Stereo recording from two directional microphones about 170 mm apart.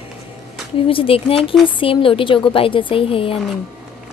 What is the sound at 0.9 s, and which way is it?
A woman's voice, 30° left (ahead or behind).